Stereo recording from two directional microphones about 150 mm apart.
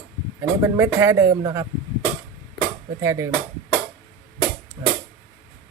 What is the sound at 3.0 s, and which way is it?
Speech, 15° right (ahead or behind).